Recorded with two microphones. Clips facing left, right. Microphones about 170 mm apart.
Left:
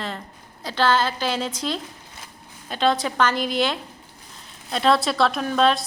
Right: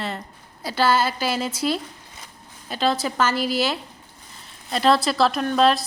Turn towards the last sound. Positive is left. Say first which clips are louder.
# right 1 dB
turn(degrees=0)  # may be behind; listen again after turning